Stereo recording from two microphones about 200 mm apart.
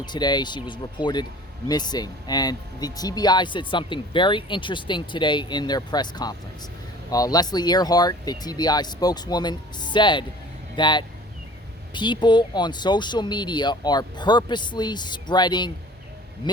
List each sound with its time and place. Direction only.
0.0 s speech: 20° left (ahead or behind)